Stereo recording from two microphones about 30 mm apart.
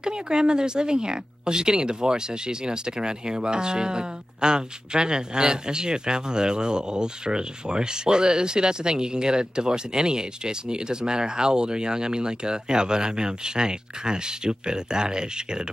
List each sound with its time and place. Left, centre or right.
0.0 s speech: right